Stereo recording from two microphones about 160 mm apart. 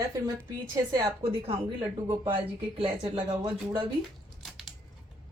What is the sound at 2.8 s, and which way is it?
Speech, 35° right (ahead or behind).